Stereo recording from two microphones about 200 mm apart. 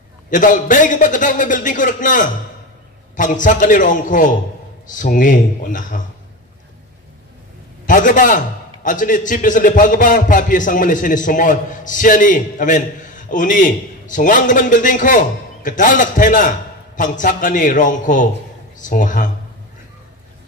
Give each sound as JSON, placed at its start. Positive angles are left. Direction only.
{"t": 0.3, "sound": "a man's voice", "side_deg": 40}
{"t": 7.8, "sound": "a man's voice", "side_deg": 40}